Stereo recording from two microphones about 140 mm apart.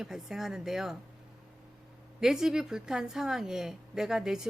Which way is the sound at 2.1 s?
5° right (ahead or behind).